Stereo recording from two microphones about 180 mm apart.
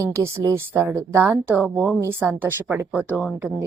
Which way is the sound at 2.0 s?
15° right (ahead or behind).